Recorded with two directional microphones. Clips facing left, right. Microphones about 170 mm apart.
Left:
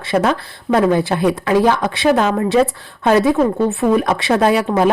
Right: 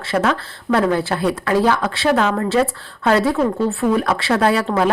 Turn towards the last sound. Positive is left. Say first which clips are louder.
# left 3 dB
turn(degrees=15)  # may be behind; listen again after turning